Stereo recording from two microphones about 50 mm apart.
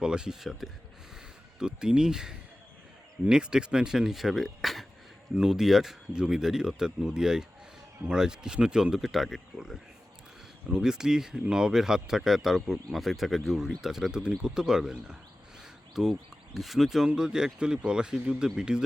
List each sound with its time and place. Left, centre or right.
0.0 s speech: centre
10.7 s speech: centre